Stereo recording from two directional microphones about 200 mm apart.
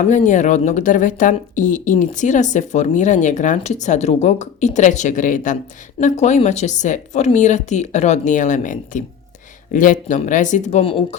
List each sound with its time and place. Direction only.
0.0 s speech: 40° left (ahead or behind)